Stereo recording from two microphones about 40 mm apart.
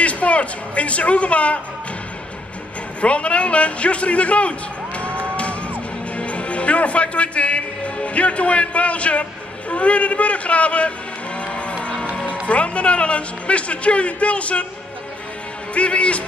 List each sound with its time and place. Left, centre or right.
0.0 s speech: left
3.0 s speech: left
5.2 s music: left
6.1 s a man's voice: left
11.3 s music: left
12.4 s speech: left
15.7 s speech: left